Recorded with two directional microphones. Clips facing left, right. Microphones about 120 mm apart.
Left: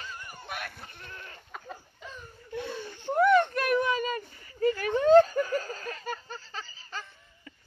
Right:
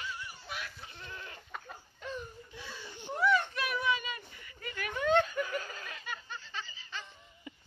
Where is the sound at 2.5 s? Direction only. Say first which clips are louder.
Left 11 dB; 60° left (ahead or behind).